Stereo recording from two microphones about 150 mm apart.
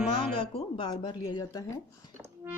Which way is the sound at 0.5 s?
35° left (ahead or behind).